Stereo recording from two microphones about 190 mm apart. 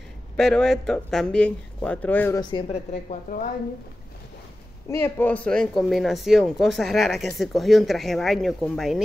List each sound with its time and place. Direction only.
0.4 s speech: 5° left (ahead or behind)
2.5 s a woman's voice: 35° left (ahead or behind)
4.8 s speech: 10° left (ahead or behind)